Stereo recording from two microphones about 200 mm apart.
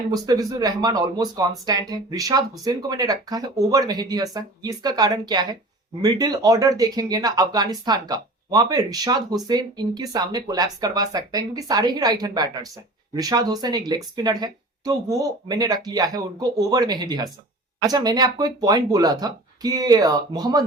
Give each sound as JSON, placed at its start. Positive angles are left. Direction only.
{"t": 0.1, "sound": "speech", "side_deg": -20}